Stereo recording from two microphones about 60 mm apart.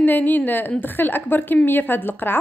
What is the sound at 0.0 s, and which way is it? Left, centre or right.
A woman's voice, left.